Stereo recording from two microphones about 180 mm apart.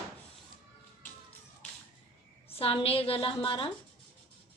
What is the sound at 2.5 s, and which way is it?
A woman's voice, 30° left (ahead or behind).